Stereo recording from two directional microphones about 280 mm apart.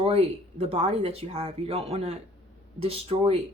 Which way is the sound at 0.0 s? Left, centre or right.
Right.